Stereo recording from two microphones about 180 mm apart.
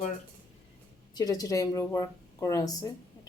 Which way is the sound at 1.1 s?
20° left (ahead or behind).